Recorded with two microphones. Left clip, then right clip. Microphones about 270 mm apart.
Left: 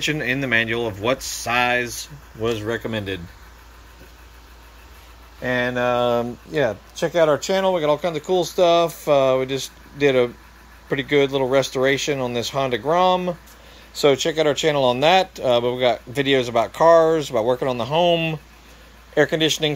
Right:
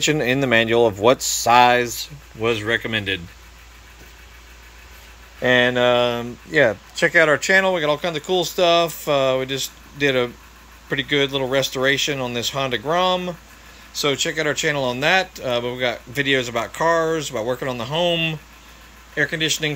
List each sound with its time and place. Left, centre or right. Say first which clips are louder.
0.1 s speech: right 3 dB; centre
2.7 s speech: right 4 dB; centre
5.4 s speech: right 5 dB; centre
7.4 s speech: right 2 dB; centre